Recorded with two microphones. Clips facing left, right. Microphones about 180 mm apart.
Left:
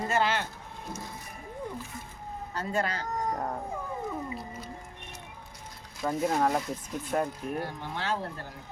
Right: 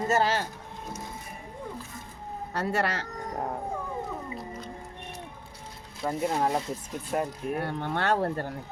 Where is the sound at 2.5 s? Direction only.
75° right (ahead or behind).